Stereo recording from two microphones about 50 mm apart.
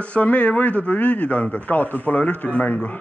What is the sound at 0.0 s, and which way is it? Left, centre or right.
Speech, left.